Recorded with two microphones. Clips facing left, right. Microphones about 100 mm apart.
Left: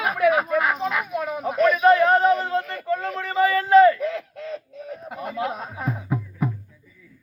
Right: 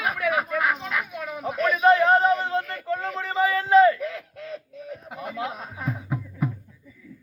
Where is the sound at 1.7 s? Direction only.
25° right (ahead or behind).